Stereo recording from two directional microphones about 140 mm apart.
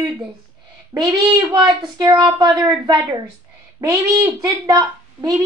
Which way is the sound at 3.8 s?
25° right (ahead or behind).